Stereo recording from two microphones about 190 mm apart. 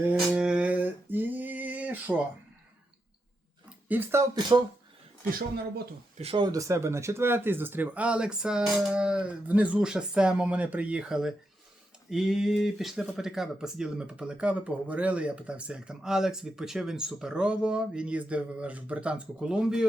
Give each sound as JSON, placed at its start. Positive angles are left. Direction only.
{"t": 0.0, "sound": "a sound", "side_deg": -5}
{"t": 3.8, "sound": "speech", "side_deg": -10}
{"t": 6.1, "sound": "speech", "side_deg": -30}